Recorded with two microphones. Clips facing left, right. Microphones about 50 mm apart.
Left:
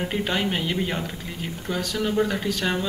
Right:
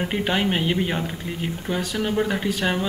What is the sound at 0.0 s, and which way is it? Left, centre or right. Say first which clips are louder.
A man's voice: right 2 dB; right.